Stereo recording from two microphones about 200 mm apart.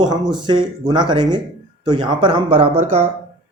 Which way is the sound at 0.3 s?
20° right (ahead or behind).